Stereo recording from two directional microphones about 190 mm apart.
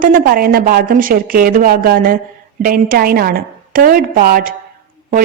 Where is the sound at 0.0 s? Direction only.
45° right (ahead or behind).